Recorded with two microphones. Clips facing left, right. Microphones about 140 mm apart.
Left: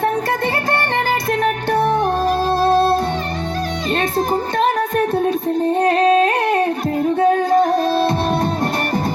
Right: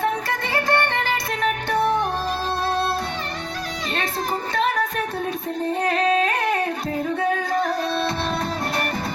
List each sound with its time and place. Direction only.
0.0 s music: 40° left (ahead or behind)
4.5 s music: 40° left (ahead or behind)
5.8 s singing: 35° left (ahead or behind)